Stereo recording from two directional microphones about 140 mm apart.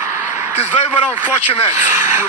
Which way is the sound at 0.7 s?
45° left (ahead or behind).